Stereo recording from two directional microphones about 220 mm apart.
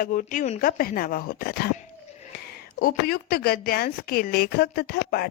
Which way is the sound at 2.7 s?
45° left (ahead or behind).